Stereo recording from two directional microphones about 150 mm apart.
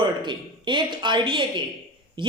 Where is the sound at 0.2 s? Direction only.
30° right (ahead or behind).